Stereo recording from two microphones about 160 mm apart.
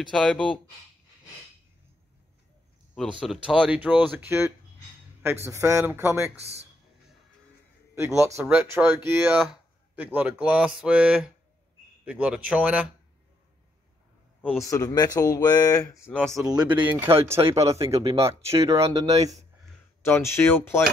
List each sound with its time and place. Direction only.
0.1 s speech: centre (ahead or behind)
3.0 s speech: 5° right (ahead or behind)
6.3 s speech: 40° right (ahead or behind)
7.9 s a man's voice: 15° right (ahead or behind)
14.4 s a man's voice: centre (ahead or behind)
14.7 s speech: 25° left (ahead or behind)
16.4 s speech: 10° right (ahead or behind)
17.4 s speech: 35° right (ahead or behind)
17.6 s speech: 20° right (ahead or behind)
17.9 s speech: 40° right (ahead or behind)
18.4 s speech: 20° right (ahead or behind)
20.1 s speech: 15° left (ahead or behind)